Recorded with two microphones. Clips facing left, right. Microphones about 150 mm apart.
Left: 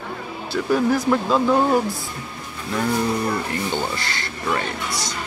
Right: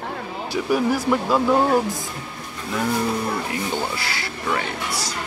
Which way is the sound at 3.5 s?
5° right (ahead or behind).